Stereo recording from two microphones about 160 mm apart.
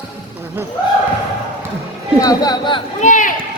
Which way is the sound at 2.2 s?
25° left (ahead or behind).